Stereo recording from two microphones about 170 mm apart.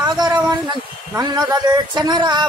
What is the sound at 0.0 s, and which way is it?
A man's voice, 25° right (ahead or behind).